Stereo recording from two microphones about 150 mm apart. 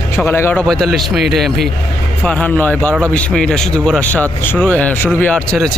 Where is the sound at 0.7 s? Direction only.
Centre (ahead or behind).